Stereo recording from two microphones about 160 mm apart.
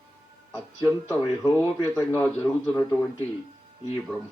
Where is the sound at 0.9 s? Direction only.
20° right (ahead or behind).